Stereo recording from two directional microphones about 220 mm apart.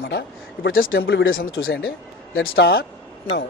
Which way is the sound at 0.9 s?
60° left (ahead or behind).